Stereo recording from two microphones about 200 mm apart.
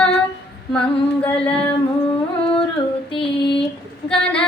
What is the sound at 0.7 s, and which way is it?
Female singing, 5° left (ahead or behind).